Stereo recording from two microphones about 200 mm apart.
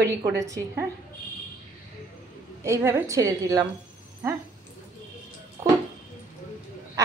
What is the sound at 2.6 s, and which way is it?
A woman's voice, 15° right (ahead or behind).